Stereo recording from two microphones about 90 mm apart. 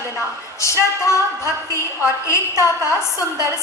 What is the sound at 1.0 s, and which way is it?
A woman's voice, 35° left (ahead or behind).